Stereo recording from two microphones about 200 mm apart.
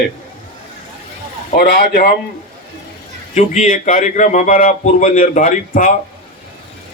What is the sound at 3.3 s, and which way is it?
Speech, 35° left (ahead or behind).